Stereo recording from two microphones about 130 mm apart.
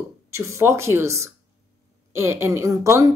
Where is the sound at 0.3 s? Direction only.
20° right (ahead or behind).